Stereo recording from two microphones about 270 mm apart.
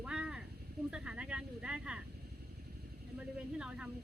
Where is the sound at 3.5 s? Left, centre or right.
Centre.